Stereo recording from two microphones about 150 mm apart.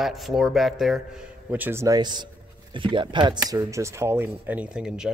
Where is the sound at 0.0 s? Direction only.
Centre (ahead or behind).